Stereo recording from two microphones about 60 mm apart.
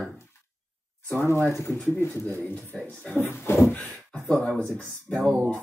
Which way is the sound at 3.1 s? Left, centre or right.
Left.